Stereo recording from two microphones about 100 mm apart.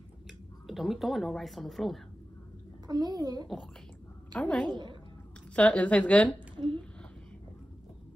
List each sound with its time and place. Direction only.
0.7 s a woman's voice: centre (ahead or behind)
2.9 s a child's voice: 40° right (ahead or behind)
4.3 s a woman's voice: 15° left (ahead or behind)